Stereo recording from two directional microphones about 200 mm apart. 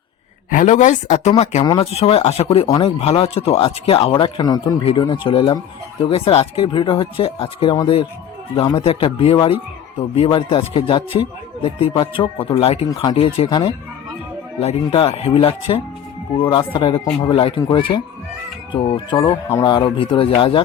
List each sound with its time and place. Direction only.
0.5 s a man's voice: 40° left (ahead or behind)